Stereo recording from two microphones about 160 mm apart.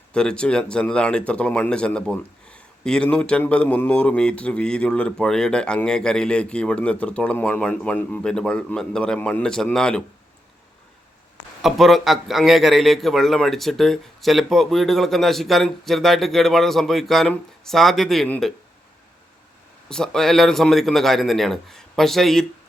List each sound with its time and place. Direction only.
0.1 s speech: 5° left (ahead or behind)
11.6 s a man's voice: centre (ahead or behind)
19.9 s a man's voice: 5° left (ahead or behind)